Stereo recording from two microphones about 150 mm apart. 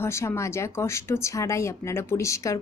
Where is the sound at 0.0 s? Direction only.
20° left (ahead or behind).